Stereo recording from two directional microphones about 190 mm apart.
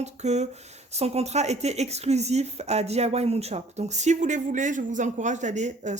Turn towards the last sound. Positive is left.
turn(degrees=-40)  # may be behind; listen again after turning